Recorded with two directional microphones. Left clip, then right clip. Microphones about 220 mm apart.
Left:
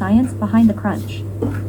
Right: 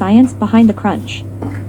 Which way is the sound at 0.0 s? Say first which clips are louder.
Right 6 dB; 35° right (ahead or behind).